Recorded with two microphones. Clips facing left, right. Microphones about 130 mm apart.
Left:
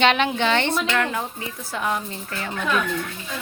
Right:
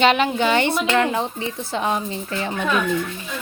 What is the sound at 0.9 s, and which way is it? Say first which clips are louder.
Speech: right 5 dB; 25° right (ahead or behind).